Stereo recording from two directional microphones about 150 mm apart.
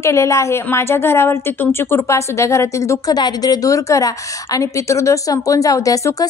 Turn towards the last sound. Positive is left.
turn(degrees=20)  # may be behind; listen again after turning